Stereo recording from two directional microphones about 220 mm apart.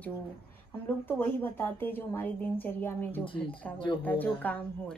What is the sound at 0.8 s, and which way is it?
A woman's voice, 10° left (ahead or behind).